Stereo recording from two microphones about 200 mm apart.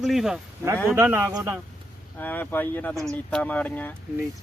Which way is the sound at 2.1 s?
10° left (ahead or behind).